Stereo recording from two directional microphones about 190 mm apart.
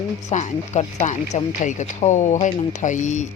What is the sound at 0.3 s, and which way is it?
Speech, 40° left (ahead or behind).